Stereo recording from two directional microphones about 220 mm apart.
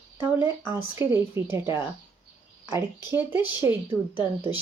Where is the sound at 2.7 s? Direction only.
10° right (ahead or behind).